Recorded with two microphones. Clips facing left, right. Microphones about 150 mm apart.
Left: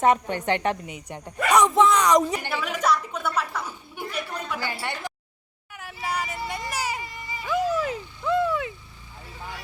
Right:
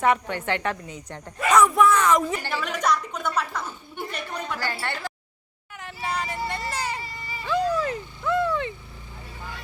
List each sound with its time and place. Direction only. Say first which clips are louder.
0.0 s a woman's voice: left 2 dB; 20° left (ahead or behind)
5.7 s music: even; 5° left (ahead or behind)